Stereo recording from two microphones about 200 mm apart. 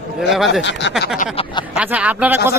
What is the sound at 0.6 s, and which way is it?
Speech, 60° left (ahead or behind).